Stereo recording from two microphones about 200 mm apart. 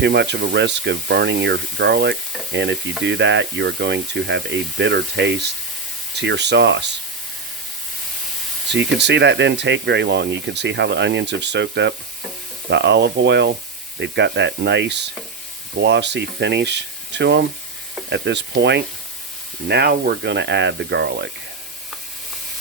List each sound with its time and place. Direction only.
0.0 s speech: 55° right (ahead or behind)
8.7 s speech: 60° right (ahead or behind)